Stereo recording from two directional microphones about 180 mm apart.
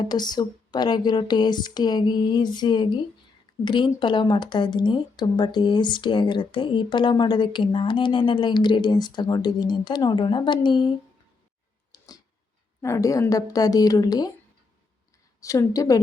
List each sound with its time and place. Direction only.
0.0 s a woman's voice: 25° left (ahead or behind)
11.9 s a sound: 20° left (ahead or behind)
12.8 s a woman's voice: 15° left (ahead or behind)
15.4 s a woman's voice: 15° left (ahead or behind)